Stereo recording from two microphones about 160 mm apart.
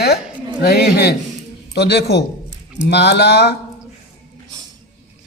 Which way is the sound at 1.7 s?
90° left.